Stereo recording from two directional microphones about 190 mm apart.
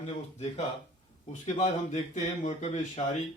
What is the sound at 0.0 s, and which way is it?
Speech, 30° left (ahead or behind).